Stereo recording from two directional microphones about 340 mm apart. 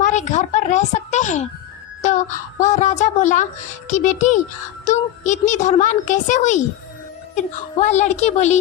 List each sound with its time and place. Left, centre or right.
0.0 s a woman's voice: left